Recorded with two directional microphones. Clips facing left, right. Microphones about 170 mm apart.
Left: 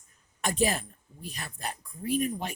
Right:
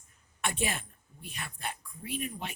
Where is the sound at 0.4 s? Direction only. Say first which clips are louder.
Left 6 dB; 40° left (ahead or behind).